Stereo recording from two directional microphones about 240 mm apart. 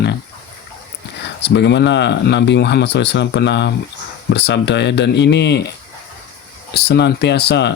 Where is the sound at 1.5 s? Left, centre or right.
Left.